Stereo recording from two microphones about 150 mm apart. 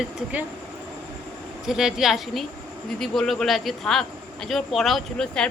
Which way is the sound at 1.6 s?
5° right (ahead or behind).